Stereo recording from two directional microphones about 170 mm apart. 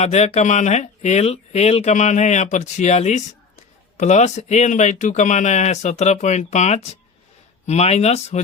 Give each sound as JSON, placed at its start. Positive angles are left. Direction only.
{"t": 0.0, "sound": "speech", "side_deg": 40}